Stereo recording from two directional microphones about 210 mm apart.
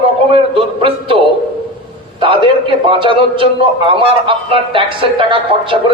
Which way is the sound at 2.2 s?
25° right (ahead or behind).